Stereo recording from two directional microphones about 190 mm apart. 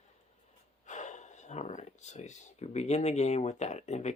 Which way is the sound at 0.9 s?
40° left (ahead or behind).